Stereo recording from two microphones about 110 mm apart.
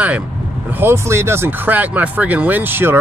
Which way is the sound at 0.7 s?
25° right (ahead or behind).